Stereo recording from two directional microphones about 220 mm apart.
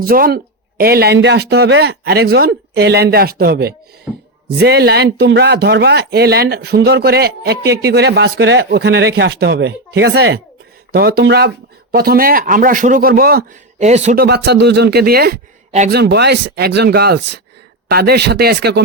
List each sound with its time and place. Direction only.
0.0 s speech: 40° right (ahead or behind)
4.1 s a sound: 5° right (ahead or behind)
4.4 s speech: 45° right (ahead or behind); by 14.2 s 30° right (ahead or behind)
14.2 s speech: 50° right (ahead or behind)